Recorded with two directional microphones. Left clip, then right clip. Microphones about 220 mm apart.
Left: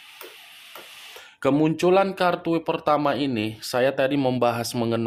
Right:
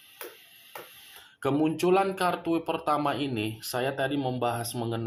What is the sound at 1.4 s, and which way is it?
Speech, 40° left (ahead or behind).